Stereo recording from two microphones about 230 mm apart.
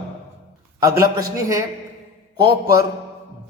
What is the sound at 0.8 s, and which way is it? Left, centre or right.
Speech, centre.